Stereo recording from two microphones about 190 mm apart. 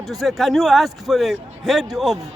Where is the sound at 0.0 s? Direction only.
Centre (ahead or behind).